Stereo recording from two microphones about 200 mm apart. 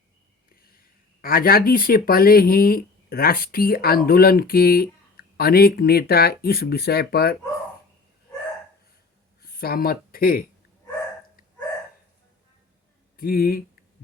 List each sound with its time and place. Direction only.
1.2 s speech: 45° left (ahead or behind)
9.4 s speech: 50° left (ahead or behind)
13.1 s speech: 45° left (ahead or behind)